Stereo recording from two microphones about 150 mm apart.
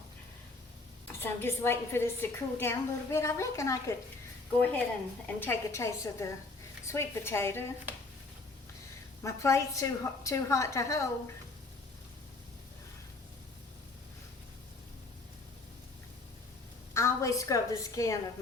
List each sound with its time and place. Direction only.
1.2 s a woman's voice: 15° left (ahead or behind)
9.2 s a woman's voice: 20° left (ahead or behind)
16.9 s a woman's voice: 20° left (ahead or behind)